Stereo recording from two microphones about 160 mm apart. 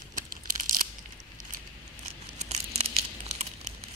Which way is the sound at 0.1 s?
60° right (ahead or behind).